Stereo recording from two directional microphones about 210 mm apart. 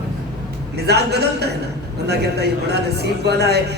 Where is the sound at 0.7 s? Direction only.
50° right (ahead or behind).